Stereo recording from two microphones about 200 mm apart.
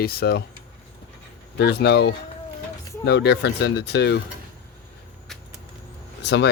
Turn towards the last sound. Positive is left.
turn(degrees=60)  # may be behind; listen again after turning